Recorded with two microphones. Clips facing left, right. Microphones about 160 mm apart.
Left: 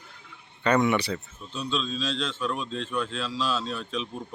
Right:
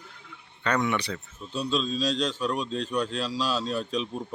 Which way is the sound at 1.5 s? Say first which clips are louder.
Right 3 dB; 40° right (ahead or behind).